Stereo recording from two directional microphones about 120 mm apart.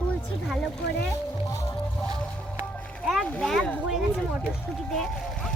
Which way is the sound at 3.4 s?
Centre (ahead or behind).